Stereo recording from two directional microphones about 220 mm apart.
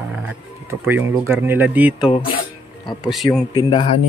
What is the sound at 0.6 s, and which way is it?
Speech, 10° right (ahead or behind).